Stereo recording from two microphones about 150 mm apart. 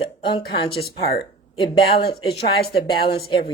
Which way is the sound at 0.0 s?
35° left (ahead or behind).